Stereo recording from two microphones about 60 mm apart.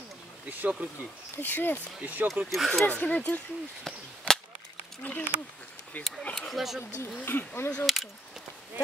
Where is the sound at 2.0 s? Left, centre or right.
Right.